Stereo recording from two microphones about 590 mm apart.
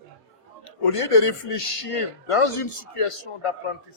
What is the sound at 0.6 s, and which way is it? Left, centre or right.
Speech, left.